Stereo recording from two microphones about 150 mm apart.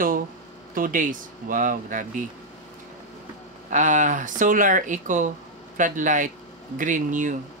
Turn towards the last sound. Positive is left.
turn(degrees=-60)  # may be behind; listen again after turning